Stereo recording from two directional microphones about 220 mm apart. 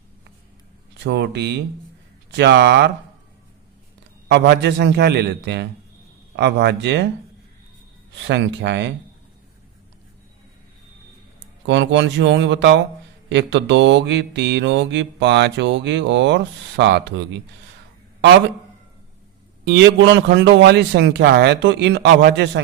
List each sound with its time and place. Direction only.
1.0 s mantra: 50° right (ahead or behind)
4.3 s mantra: 50° right (ahead or behind)
8.2 s mantra: 50° right (ahead or behind)
11.6 s speech: 55° right (ahead or behind)
13.3 s mantra: 55° right (ahead or behind)
19.6 s mantra: 50° right (ahead or behind)